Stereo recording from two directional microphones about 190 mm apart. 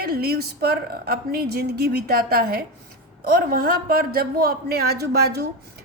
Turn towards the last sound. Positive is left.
turn(degrees=-60)  # may be behind; listen again after turning